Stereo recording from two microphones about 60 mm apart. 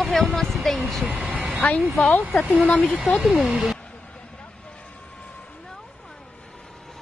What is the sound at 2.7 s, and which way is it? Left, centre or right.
Speech, left.